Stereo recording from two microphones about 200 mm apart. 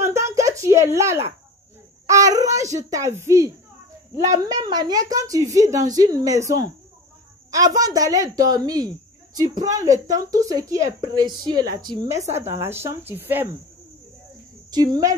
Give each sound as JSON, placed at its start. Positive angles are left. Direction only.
{"t": 0.0, "sound": "a sound", "side_deg": -15}
{"t": 2.0, "sound": "a woman's voice", "side_deg": -15}
{"t": 14.7, "sound": "speech", "side_deg": -20}